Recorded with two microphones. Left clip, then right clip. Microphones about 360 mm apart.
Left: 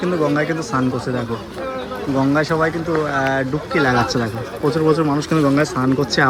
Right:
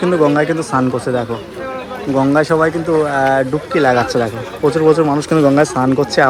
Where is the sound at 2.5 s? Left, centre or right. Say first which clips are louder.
Right 6 dB; right.